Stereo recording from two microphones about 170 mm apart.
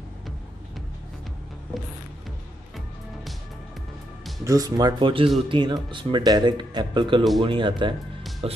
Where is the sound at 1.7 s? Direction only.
Centre (ahead or behind).